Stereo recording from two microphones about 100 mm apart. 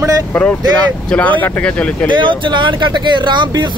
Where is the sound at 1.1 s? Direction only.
15° left (ahead or behind).